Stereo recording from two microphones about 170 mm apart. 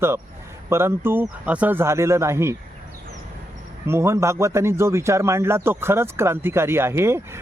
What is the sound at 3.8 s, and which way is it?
Speech, 15° right (ahead or behind).